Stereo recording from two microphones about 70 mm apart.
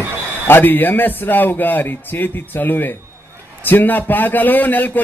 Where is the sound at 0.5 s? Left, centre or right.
Left.